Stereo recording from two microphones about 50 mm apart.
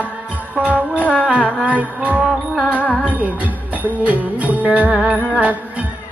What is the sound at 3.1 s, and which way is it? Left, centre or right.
Music, right.